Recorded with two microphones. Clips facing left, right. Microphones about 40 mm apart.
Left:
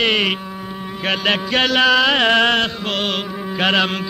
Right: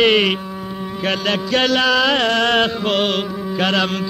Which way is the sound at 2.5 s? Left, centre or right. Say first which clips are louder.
Right 2 dB; centre.